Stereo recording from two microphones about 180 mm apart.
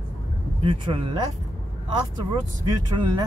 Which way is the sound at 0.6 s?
30° right (ahead or behind).